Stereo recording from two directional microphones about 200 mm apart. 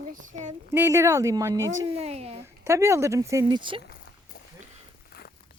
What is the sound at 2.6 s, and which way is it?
Speech, 15° right (ahead or behind).